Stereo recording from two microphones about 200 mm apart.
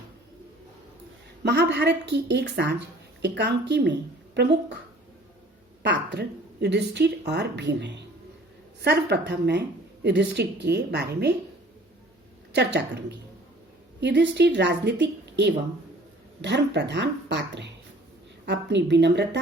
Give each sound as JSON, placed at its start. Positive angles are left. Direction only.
{"t": 1.5, "sound": "speech", "side_deg": -60}
{"t": 5.8, "sound": "speech", "side_deg": -60}
{"t": 12.5, "sound": "speech", "side_deg": -60}